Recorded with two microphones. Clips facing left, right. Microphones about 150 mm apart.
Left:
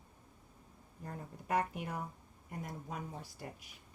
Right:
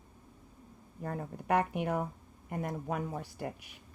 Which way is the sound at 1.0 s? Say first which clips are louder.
Right 8 dB; 75° right (ahead or behind).